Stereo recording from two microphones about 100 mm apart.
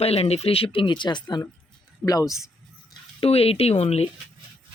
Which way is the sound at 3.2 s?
80° left.